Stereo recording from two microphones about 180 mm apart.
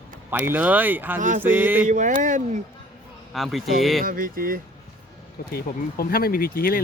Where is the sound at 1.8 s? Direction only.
40° right (ahead or behind).